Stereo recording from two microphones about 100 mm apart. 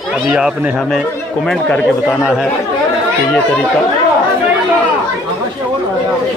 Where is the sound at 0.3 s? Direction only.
5° right (ahead or behind).